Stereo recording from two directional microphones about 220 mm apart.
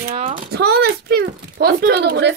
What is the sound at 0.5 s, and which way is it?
Speech, 50° right (ahead or behind).